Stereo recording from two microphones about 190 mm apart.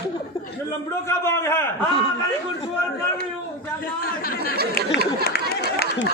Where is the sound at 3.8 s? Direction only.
50° left (ahead or behind).